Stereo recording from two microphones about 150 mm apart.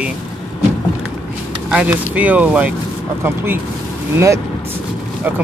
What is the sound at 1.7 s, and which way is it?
Speech, 10° right (ahead or behind).